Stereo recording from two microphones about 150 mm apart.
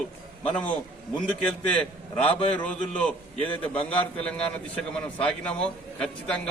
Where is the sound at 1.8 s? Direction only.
10° left (ahead or behind).